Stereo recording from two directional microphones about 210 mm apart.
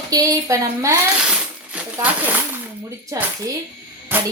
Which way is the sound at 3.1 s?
15° right (ahead or behind).